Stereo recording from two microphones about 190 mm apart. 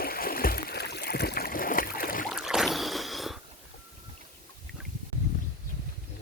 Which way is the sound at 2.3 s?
5° right (ahead or behind).